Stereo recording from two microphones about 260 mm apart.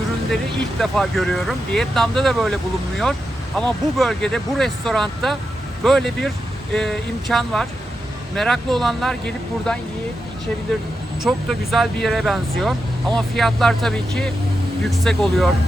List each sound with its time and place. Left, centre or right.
0.8 s speech: centre
11.2 s speech: centre